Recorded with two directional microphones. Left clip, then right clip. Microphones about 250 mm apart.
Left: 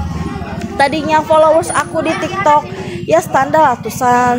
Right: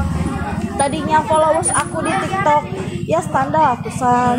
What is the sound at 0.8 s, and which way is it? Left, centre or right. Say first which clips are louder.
Speech: left 4 dB; left.